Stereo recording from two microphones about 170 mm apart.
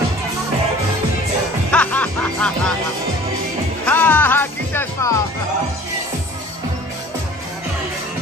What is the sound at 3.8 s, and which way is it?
Music, 10° left (ahead or behind).